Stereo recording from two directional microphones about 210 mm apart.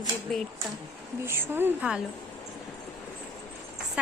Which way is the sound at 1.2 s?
10° right (ahead or behind).